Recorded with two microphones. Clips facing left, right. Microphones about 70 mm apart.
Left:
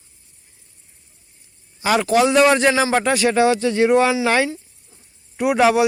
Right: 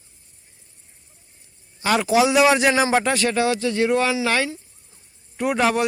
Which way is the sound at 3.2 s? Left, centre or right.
Left.